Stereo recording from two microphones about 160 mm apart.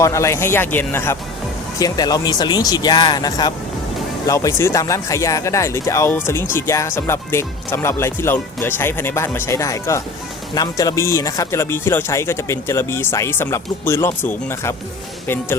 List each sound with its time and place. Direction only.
0.0 s speech: 20° left (ahead or behind)
1.8 s speech: 25° left (ahead or behind)